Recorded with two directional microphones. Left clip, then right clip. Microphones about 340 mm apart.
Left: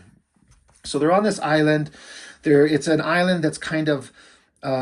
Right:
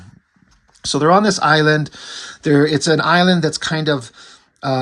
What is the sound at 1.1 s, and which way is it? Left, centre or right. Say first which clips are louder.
Speech: right 6 dB; right.